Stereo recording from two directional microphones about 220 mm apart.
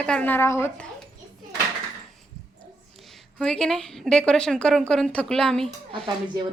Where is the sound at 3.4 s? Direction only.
5° left (ahead or behind).